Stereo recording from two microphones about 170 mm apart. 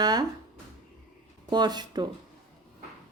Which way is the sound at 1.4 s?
25° right (ahead or behind).